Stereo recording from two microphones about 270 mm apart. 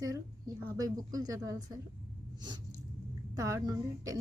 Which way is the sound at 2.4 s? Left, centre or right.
Centre.